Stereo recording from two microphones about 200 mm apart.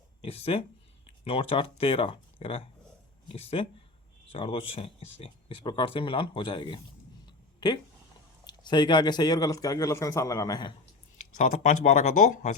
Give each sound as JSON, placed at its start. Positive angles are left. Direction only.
{"t": 0.2, "sound": "speech", "side_deg": 30}
{"t": 7.3, "sound": "a sound", "side_deg": 20}
{"t": 8.4, "sound": "speech", "side_deg": 20}
{"t": 11.3, "sound": "speech", "side_deg": 40}